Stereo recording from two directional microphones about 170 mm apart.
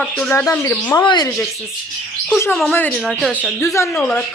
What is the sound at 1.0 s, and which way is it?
Speech, 25° left (ahead or behind).